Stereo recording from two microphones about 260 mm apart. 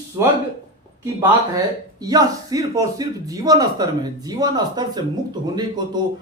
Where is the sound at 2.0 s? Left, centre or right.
Centre.